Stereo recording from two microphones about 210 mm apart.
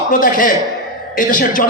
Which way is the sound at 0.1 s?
40° left (ahead or behind).